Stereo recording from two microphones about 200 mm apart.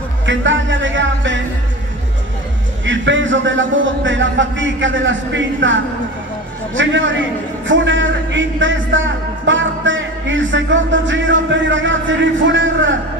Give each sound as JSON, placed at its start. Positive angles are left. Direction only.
{"t": 0.3, "sound": "music", "side_deg": -70}
{"t": 2.8, "sound": "a man's voice", "side_deg": -70}